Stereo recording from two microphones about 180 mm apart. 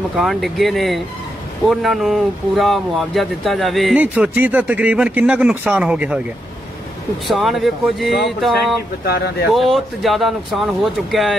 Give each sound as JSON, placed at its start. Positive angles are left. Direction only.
{"t": 0.1, "sound": "speech", "side_deg": 0}
{"t": 7.2, "sound": "speech", "side_deg": 0}
{"t": 9.0, "sound": "speech", "side_deg": 60}
{"t": 9.5, "sound": "speech", "side_deg": 0}